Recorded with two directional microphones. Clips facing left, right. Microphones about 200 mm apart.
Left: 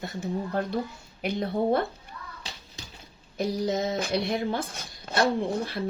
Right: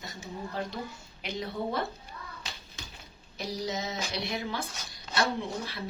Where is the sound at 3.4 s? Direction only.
50° left (ahead or behind).